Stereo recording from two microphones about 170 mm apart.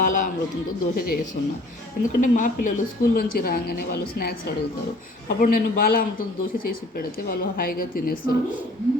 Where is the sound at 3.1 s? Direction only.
65° left (ahead or behind).